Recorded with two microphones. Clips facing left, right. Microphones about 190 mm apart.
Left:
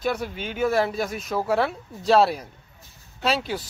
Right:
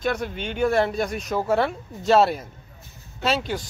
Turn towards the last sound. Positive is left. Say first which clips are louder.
# right 1 dB
turn(degrees=0)  # may be behind; listen again after turning